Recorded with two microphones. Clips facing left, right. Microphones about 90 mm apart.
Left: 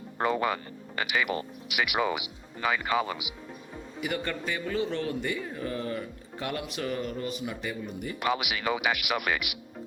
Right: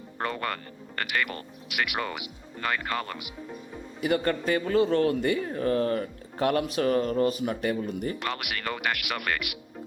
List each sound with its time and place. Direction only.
0.2 s speech: 5° left (ahead or behind)
4.0 s speech: 40° right (ahead or behind); by 8.1 s 55° right (ahead or behind)
8.2 s speech: 5° left (ahead or behind)